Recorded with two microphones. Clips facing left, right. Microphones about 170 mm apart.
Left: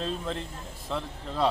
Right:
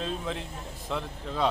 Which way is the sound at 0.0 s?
5° right (ahead or behind).